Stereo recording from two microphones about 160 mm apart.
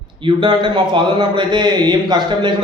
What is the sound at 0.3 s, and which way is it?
A man's voice, 30° right (ahead or behind).